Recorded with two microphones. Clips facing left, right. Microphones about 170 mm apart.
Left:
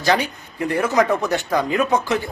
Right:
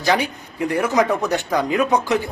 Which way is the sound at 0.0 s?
15° right (ahead or behind).